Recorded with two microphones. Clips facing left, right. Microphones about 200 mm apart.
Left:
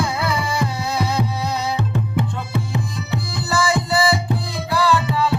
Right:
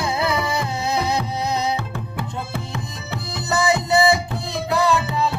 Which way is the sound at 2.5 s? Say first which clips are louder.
Left 5 dB; 20° left (ahead or behind).